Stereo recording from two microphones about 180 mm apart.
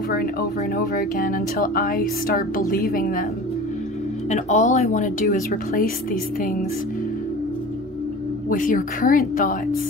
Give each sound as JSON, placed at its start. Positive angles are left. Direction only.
{"t": 0.1, "sound": "speech", "side_deg": 55}
{"t": 4.3, "sound": "speech", "side_deg": 40}
{"t": 8.5, "sound": "speech", "side_deg": 50}